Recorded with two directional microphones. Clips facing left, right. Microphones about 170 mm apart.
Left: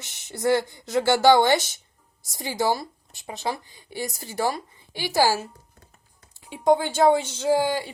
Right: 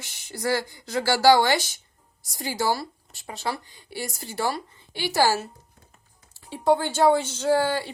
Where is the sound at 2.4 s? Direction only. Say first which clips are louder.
Left 1 dB; 20° left (ahead or behind).